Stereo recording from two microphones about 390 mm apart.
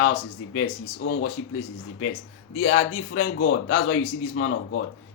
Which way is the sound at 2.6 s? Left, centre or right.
Left.